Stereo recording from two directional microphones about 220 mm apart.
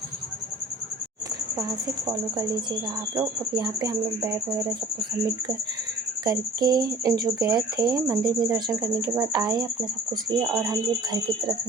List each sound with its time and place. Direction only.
3.2 s speech: 15° right (ahead or behind)
6.2 s speech: 15° right (ahead or behind)